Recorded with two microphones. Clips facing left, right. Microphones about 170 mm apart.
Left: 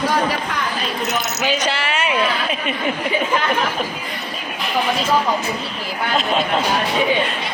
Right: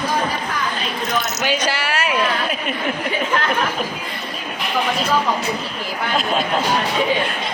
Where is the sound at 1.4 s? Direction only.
Centre (ahead or behind).